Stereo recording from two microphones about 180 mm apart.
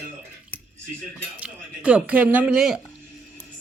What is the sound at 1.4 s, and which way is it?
Speech, 5° right (ahead or behind).